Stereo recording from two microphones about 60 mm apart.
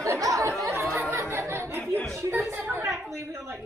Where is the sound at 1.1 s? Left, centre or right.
Right.